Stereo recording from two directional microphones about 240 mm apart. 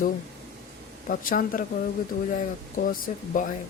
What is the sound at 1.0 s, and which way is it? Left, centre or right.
Speech, left.